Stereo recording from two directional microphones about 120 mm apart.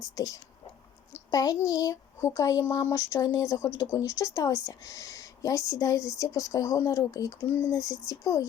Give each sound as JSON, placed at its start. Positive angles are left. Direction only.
{"t": 0.0, "sound": "speech", "side_deg": 30}